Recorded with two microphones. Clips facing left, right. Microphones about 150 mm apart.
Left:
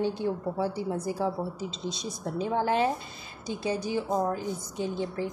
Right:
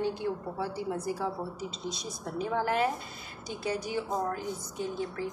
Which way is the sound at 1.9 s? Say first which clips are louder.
Left 3 dB; 25° left (ahead or behind).